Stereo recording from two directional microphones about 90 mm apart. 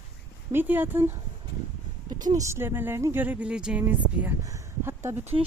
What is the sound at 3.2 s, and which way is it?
Speech, 15° right (ahead or behind).